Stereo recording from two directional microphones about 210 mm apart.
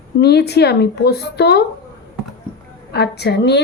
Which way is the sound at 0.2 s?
50° left (ahead or behind).